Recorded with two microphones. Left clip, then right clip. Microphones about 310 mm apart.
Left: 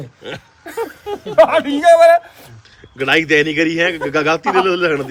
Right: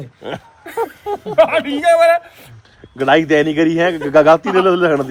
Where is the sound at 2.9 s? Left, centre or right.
Centre.